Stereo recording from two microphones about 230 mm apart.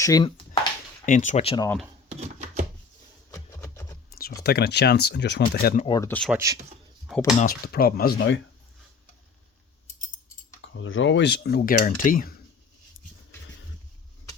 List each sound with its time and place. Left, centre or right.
0.0 s a sound: centre
1.0 s speech: left
1.6 s speech: centre
2.0 s a sound: right
3.3 s music: centre
4.4 s speech: left
5.8 s speech: centre
6.3 s a man's voice: centre
7.3 s speech: left
10.6 s speech: left